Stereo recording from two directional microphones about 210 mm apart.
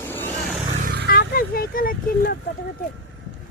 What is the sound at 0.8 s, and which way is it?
Vehicle, 45° right (ahead or behind).